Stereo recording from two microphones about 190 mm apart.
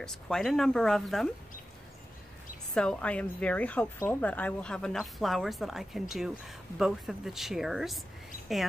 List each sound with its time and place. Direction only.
0.0 s a woman's voice: centre (ahead or behind)
2.7 s a woman's voice: 5° left (ahead or behind)